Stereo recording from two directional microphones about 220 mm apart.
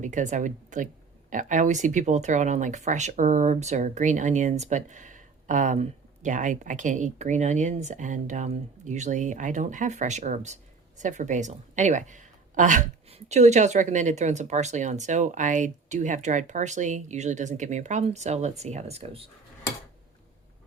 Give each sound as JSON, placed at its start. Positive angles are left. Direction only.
{"t": 0.0, "sound": "speech", "side_deg": -35}